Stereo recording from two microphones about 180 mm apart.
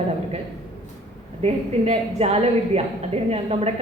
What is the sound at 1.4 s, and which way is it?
A woman's voice, 35° right (ahead or behind).